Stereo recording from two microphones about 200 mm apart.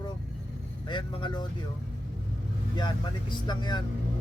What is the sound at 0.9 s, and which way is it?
Speech, 20° left (ahead or behind).